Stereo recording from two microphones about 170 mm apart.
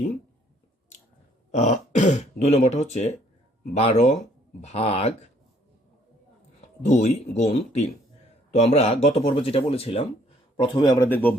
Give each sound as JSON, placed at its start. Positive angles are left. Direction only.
{"t": 1.5, "sound": "speech", "side_deg": 40}
{"t": 6.8, "sound": "speech", "side_deg": 45}
{"t": 10.8, "sound": "speech", "side_deg": 25}
{"t": 11.1, "sound": "speech", "side_deg": 10}